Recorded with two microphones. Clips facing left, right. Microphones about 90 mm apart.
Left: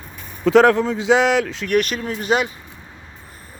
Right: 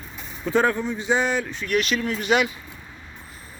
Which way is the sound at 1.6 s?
50° left (ahead or behind).